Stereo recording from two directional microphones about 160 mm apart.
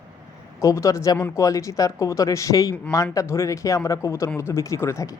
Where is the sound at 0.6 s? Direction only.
20° left (ahead or behind).